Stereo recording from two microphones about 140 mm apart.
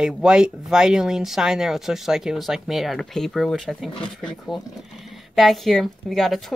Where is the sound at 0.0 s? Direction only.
5° right (ahead or behind).